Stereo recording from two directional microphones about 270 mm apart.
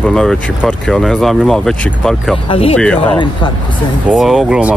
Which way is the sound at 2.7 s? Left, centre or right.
Centre.